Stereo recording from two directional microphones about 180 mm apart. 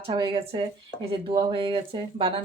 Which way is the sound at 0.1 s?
25° right (ahead or behind).